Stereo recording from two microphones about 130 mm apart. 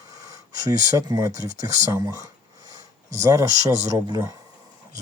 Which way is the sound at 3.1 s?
25° right (ahead or behind).